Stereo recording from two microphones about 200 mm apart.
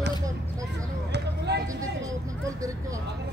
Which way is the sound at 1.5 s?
55° right (ahead or behind).